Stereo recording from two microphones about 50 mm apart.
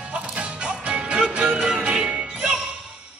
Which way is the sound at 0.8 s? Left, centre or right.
Right.